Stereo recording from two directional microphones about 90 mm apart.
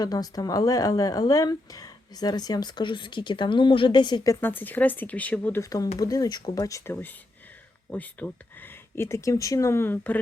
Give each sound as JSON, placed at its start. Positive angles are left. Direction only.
{"t": 0.0, "sound": "a woman's voice", "side_deg": 45}
{"t": 4.4, "sound": "speech", "side_deg": 20}
{"t": 5.6, "sound": "speech", "side_deg": 40}
{"t": 7.9, "sound": "speech", "side_deg": 15}
{"t": 9.0, "sound": "speech", "side_deg": 30}